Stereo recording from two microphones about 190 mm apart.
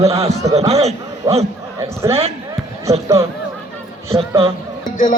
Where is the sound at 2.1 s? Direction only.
30° right (ahead or behind).